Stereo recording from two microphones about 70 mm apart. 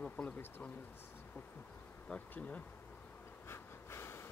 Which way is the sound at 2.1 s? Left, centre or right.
Left.